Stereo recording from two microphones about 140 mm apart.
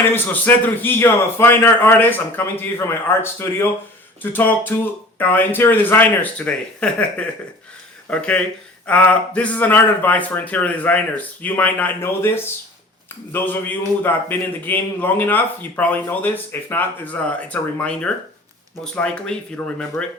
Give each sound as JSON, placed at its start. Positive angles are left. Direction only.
{"t": 0.0, "sound": "a man's voice", "side_deg": 15}